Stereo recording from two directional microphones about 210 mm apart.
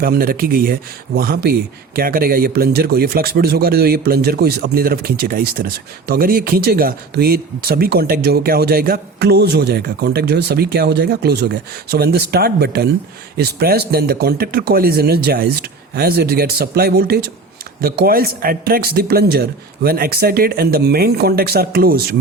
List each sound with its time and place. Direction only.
0.0 s speech: 45° right (ahead or behind)